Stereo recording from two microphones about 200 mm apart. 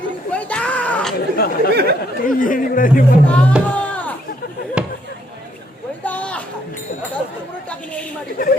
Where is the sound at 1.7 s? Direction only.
55° right (ahead or behind).